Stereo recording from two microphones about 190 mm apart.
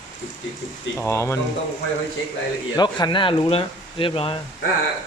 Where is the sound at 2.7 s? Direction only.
25° left (ahead or behind).